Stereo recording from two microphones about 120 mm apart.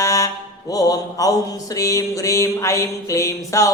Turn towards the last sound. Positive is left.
turn(degrees=25)  # may be behind; listen again after turning